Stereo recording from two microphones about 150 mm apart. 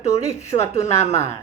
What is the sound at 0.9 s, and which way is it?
Speech, 45° left (ahead or behind).